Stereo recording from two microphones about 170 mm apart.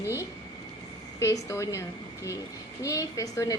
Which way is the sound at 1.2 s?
15° left (ahead or behind).